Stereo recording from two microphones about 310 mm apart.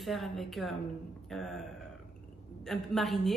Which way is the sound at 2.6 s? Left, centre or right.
Centre.